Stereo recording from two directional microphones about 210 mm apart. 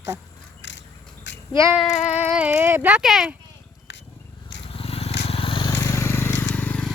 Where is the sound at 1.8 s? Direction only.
35° left (ahead or behind).